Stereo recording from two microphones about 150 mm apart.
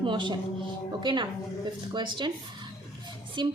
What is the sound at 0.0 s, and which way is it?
A woman's voice, 30° right (ahead or behind).